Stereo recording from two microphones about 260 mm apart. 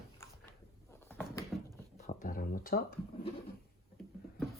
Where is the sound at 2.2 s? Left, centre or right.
Left.